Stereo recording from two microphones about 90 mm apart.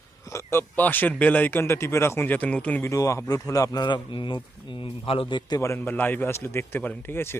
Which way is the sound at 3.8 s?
60° left (ahead or behind).